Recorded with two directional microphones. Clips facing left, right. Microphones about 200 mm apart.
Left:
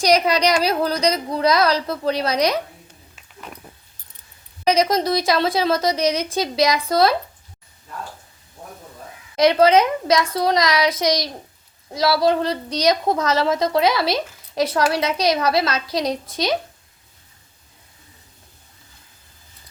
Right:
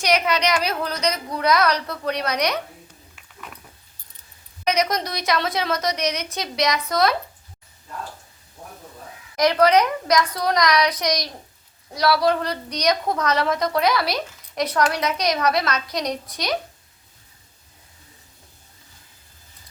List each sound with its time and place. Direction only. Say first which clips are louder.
0.0 s a woman's voice: left 4 dB; 35° left (ahead or behind)
4.6 s a woman's voice: left 5 dB; 30° left (ahead or behind)
9.3 s a woman's voice: left 3 dB; 25° left (ahead or behind)